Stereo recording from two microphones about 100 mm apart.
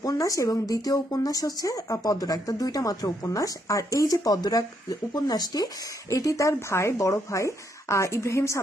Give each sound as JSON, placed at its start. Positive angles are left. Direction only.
{"t": 0.0, "sound": "speech", "side_deg": 35}